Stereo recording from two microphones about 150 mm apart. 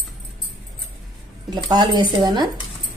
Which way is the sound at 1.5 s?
30° right (ahead or behind).